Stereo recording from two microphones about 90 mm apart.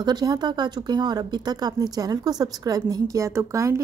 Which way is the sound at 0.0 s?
50° right (ahead or behind).